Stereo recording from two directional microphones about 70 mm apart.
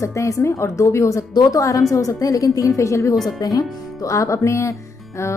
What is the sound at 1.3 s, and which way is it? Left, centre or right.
Speech, left.